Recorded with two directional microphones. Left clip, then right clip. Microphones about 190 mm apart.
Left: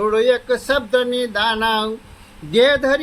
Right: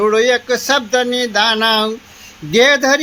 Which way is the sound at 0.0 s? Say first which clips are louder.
Right 3 dB; 40° right (ahead or behind).